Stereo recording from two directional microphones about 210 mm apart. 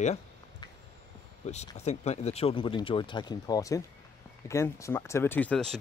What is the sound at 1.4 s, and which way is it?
Speech, 35° left (ahead or behind).